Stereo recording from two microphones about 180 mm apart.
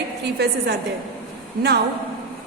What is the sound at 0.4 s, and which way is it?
Speech, 70° right (ahead or behind).